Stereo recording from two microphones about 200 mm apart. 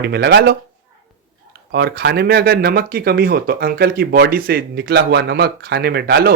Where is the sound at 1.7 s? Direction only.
55° right (ahead or behind).